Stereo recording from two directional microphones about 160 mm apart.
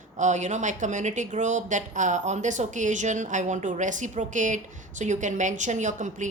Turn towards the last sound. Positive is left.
turn(degrees=-50)  # may be behind; listen again after turning